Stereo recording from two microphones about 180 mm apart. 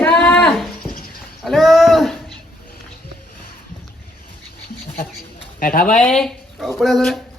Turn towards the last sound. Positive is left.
turn(degrees=0)  # may be behind; listen again after turning